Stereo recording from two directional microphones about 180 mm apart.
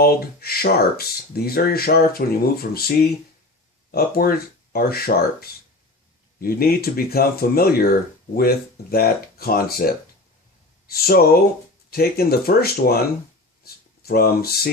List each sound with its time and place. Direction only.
0.0 s speech: 55° left (ahead or behind)
14.0 s speech: 60° left (ahead or behind)